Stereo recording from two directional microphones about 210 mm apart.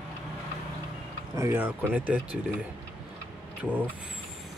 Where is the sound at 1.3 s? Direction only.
10° right (ahead or behind).